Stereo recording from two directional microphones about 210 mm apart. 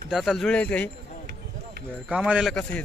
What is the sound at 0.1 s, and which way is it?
Speech, centre (ahead or behind).